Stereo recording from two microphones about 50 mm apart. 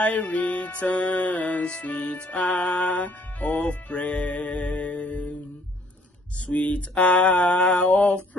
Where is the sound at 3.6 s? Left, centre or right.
Left.